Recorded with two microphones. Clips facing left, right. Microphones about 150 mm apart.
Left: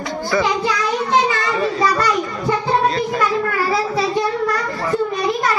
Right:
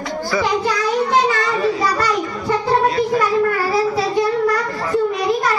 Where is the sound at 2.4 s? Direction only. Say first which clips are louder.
Right 1 dB; centre (ahead or behind).